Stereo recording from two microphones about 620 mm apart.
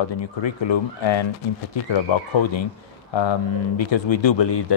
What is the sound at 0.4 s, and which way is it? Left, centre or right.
Speech, left.